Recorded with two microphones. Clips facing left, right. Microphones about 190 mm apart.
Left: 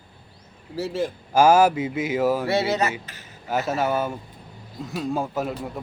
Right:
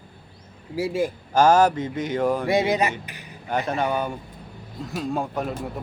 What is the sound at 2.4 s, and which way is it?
Speech, 15° right (ahead or behind).